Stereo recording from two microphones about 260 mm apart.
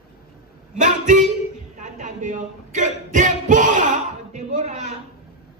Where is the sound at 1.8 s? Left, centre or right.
Right.